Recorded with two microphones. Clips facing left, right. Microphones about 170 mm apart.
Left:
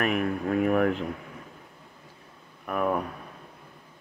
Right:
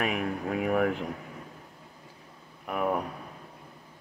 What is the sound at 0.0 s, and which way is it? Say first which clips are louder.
Speech: left 3 dB; 10° right (ahead or behind).